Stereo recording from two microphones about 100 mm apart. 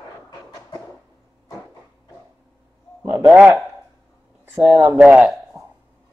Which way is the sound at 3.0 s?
15° right (ahead or behind).